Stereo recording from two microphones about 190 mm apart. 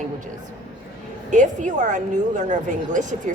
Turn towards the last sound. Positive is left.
turn(degrees=-40)  # may be behind; listen again after turning